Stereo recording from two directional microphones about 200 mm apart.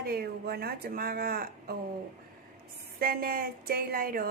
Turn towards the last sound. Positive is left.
turn(degrees=-45)  # may be behind; listen again after turning